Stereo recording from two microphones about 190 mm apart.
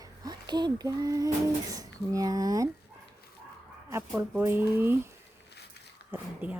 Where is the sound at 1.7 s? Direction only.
20° right (ahead or behind).